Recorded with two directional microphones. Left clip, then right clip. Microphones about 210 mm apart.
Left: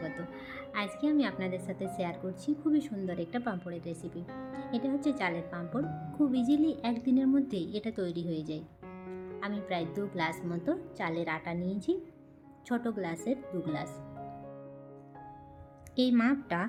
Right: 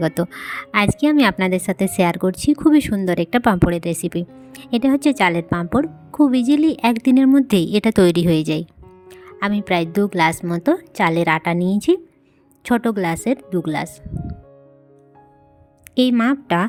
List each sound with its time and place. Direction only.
0.0 s a woman's voice: 55° right (ahead or behind)
16.0 s a woman's voice: 50° right (ahead or behind)